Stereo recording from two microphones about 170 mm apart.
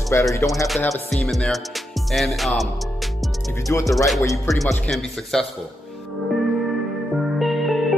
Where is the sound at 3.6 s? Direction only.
20° left (ahead or behind).